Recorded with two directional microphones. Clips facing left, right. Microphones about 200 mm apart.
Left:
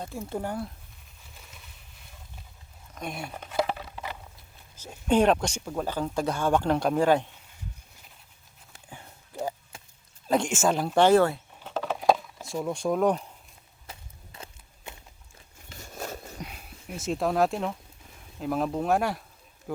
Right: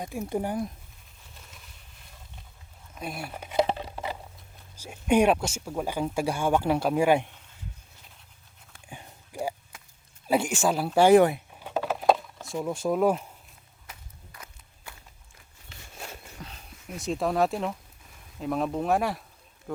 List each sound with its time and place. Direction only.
0.0 s speech: 15° right (ahead or behind)
2.9 s speech: 5° right (ahead or behind)
3.5 s patter: 25° right (ahead or behind)
4.8 s speech: 10° right (ahead or behind)
8.9 s a sound: 15° right (ahead or behind)
10.2 s speech: 5° right (ahead or behind)
13.9 s walk: 30° left (ahead or behind)
15.7 s a sound: 40° left (ahead or behind)
16.4 s a sound: 10° left (ahead or behind)
18.3 s speech: centre (ahead or behind)
19.7 s bee: 5° left (ahead or behind)